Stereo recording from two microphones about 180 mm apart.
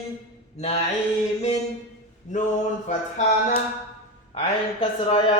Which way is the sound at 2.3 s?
40° left (ahead or behind).